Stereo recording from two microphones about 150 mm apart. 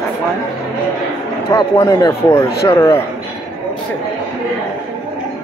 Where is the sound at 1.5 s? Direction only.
20° left (ahead or behind).